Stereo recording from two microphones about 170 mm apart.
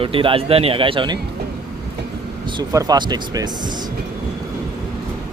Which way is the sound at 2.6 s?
20° right (ahead or behind).